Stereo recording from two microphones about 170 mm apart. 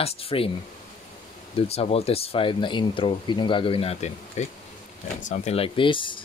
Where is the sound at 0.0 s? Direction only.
35° left (ahead or behind).